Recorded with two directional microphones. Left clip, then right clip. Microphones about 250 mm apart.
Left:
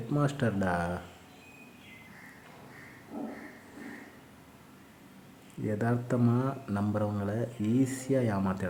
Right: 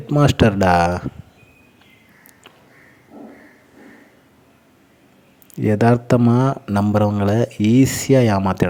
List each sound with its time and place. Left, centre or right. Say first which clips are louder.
0.1 s speech: right 15 dB; right
5.6 s speech: right 16 dB; right